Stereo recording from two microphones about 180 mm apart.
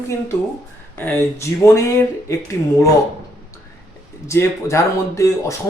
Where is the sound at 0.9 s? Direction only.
10° left (ahead or behind).